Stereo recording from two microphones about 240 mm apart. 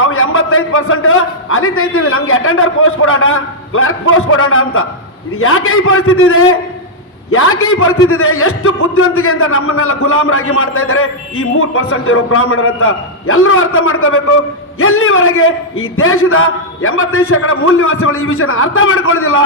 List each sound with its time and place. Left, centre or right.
0.0 s a man's voice: left